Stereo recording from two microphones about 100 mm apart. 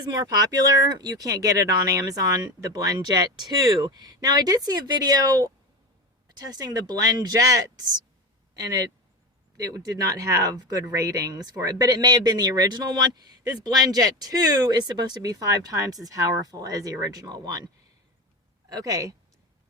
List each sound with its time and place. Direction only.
0.0 s speech: 40° right (ahead or behind)
18.7 s speech: 35° right (ahead or behind)